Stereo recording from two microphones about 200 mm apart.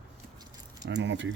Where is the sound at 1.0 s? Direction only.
65° right (ahead or behind).